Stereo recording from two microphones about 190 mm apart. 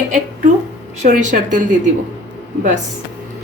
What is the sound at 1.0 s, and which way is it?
Speech, 45° right (ahead or behind).